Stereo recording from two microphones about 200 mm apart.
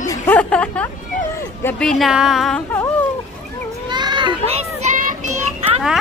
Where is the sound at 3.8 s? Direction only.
20° right (ahead or behind).